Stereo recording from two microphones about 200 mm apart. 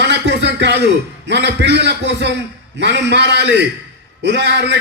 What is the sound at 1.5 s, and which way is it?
A man's voice, 60° right (ahead or behind).